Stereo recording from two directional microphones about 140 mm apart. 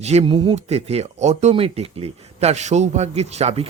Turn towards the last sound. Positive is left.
turn(degrees=-50)  # may be behind; listen again after turning